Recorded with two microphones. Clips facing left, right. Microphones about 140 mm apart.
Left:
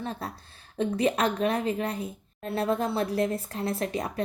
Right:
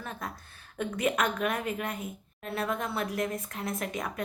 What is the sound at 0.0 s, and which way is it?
A woman's voice, 30° left (ahead or behind).